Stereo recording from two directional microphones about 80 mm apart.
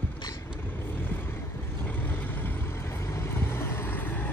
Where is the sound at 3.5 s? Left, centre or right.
Left.